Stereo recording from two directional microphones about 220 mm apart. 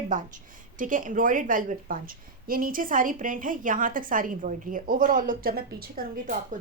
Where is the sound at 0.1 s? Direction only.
35° right (ahead or behind).